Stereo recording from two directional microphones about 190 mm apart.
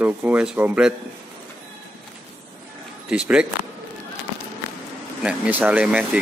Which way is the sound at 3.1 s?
5° right (ahead or behind).